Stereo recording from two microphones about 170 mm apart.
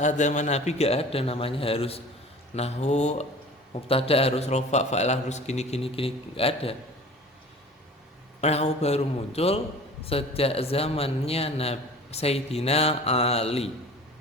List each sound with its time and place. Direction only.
0.0 s a man's voice: 45° left (ahead or behind)
8.4 s a man's voice: 40° left (ahead or behind)